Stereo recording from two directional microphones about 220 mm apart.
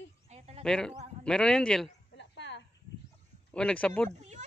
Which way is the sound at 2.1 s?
55° left (ahead or behind).